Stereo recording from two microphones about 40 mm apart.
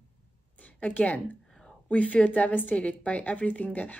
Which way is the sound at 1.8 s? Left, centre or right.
Left.